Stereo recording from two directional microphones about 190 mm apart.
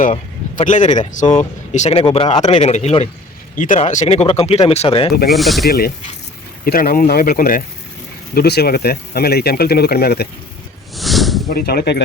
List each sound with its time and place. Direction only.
0.0 s speech: 40° left (ahead or behind); by 2.6 s 25° left (ahead or behind)
2.6 s speech: 35° left (ahead or behind)
5.3 s speech: centre (ahead or behind)
5.6 s speech: 55° left (ahead or behind)
10.9 s snake: centre (ahead or behind)
11.4 s speech: 50° left (ahead or behind)